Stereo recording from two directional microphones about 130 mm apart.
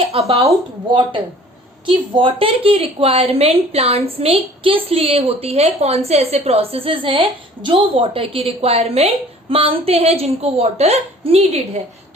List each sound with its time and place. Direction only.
0.0 s speech: 50° right (ahead or behind)
0.9 s a woman's voice: 40° right (ahead or behind)